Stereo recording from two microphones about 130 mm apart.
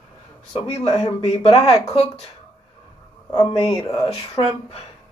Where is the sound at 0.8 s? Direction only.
35° left (ahead or behind).